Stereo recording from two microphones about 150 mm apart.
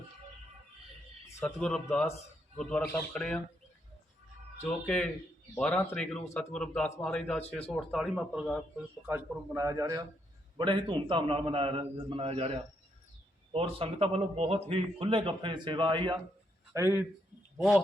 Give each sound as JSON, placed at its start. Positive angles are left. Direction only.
{"t": 1.3, "sound": "speech", "side_deg": 20}
{"t": 1.5, "sound": "a man's voice", "side_deg": 0}
{"t": 4.9, "sound": "a man's voice", "side_deg": 5}
{"t": 9.0, "sound": "a man's voice", "side_deg": -15}
{"t": 13.5, "sound": "a man's voice", "side_deg": -40}
{"t": 16.7, "sound": "speech", "side_deg": -15}
{"t": 17.6, "sound": "speech", "side_deg": 0}